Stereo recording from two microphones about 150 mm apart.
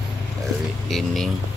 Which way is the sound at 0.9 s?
Centre (ahead or behind).